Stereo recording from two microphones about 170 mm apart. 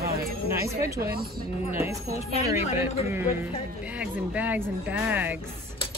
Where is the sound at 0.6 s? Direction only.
15° right (ahead or behind).